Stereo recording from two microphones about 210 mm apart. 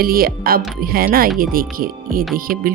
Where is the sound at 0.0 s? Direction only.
45° right (ahead or behind).